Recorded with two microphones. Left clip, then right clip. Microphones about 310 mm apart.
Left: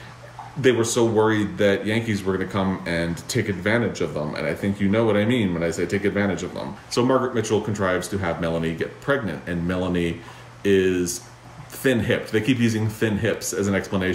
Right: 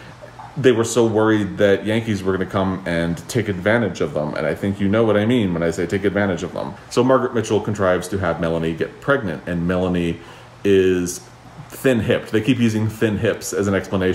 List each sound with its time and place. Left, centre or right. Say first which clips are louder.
0.6 s speech: right 4 dB; centre